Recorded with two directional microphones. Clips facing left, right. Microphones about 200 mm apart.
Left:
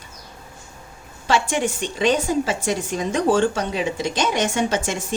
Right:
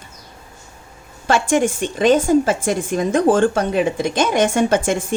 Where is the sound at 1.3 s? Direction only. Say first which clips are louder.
Right 5 dB; 50° right (ahead or behind).